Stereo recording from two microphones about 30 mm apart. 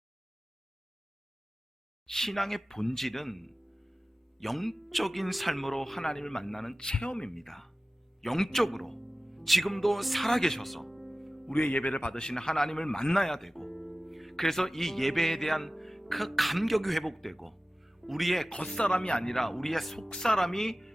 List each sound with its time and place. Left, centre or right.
2.0 s speech: centre
6.7 s speech: left
7.3 s speech: centre
10.7 s music: centre
11.6 s a man's voice: left
11.9 s speech: left
12.3 s speech: centre
18.8 s speech: left
19.2 s speech: centre